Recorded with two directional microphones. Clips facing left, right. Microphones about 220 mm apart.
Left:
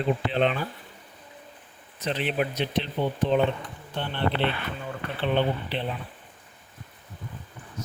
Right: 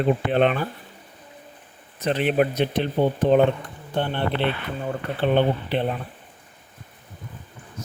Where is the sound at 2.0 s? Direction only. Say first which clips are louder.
Right 6 dB; 50° right (ahead or behind).